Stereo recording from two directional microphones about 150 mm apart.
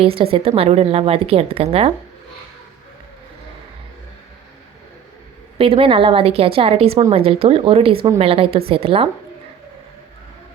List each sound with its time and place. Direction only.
0.0 s a woman's voice: 35° right (ahead or behind)
5.5 s a woman's voice: 35° right (ahead or behind)